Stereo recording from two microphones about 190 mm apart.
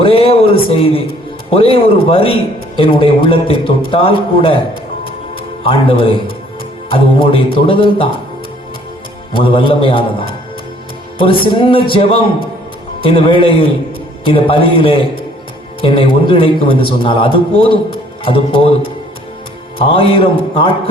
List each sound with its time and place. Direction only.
0.0 s a man's voice: 30° left (ahead or behind)
5.6 s a man's voice: 30° left (ahead or behind)
9.3 s a man's voice: 25° left (ahead or behind)
19.8 s a man's voice: 30° left (ahead or behind)